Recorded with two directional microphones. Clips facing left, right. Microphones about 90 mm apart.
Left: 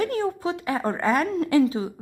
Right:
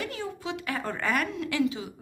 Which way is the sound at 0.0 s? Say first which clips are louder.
Left 10 dB; 45° left (ahead or behind).